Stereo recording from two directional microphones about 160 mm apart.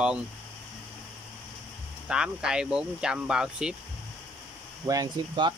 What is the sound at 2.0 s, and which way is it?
Speech, 5° right (ahead or behind).